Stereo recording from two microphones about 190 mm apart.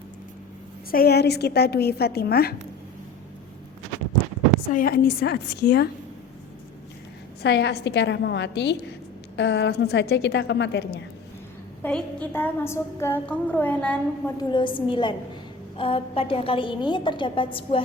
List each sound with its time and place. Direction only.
0.9 s a woman's voice: 55° left (ahead or behind)
4.7 s a woman's voice: 50° left (ahead or behind)
7.4 s a woman's voice: 60° left (ahead or behind)
11.8 s a woman's voice: 5° left (ahead or behind)
14.3 s a woman's voice: 25° left (ahead or behind)